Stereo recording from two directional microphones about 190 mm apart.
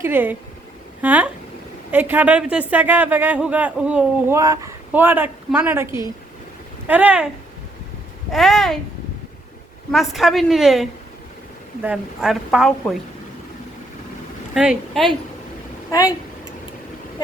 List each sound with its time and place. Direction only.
0.0 s a woman's voice: 10° right (ahead or behind)
4.4 s a woman's voice: 20° right (ahead or behind)
8.3 s a woman's voice: centre (ahead or behind)
9.9 s a woman's voice: centre (ahead or behind)
14.5 s a woman's voice: 5° right (ahead or behind)